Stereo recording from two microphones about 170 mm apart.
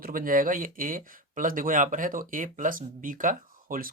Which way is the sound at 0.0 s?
55° right (ahead or behind).